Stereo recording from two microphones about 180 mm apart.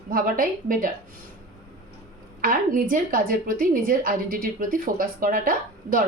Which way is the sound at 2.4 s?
50° right (ahead or behind).